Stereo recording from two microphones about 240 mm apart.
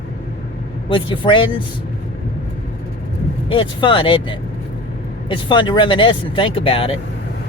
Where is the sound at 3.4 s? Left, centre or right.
Left.